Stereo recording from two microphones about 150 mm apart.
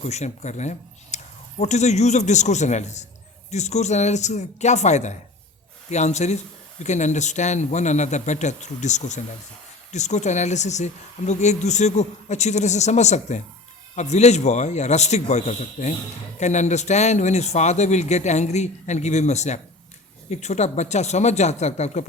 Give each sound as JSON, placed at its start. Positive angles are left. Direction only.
{"t": 0.0, "sound": "speech", "side_deg": 45}